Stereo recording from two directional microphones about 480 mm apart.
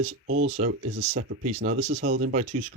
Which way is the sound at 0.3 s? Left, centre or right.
Right.